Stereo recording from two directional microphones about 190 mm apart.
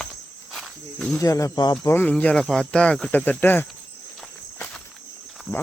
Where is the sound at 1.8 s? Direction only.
10° left (ahead or behind).